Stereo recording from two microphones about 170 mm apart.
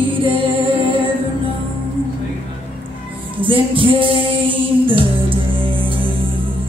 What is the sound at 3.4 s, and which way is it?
Music, 30° right (ahead or behind).